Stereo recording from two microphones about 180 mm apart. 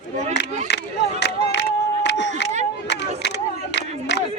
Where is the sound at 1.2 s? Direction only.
75° left (ahead or behind).